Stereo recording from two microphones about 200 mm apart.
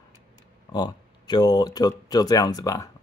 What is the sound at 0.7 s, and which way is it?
Speech, 20° left (ahead or behind).